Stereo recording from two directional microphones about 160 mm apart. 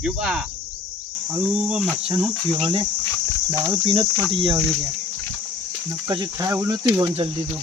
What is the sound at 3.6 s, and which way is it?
Speech, 30° right (ahead or behind).